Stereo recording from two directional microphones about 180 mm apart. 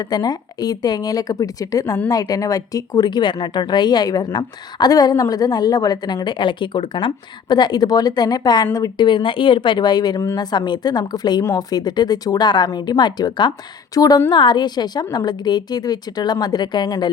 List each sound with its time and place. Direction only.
0.0 s speech: 20° left (ahead or behind)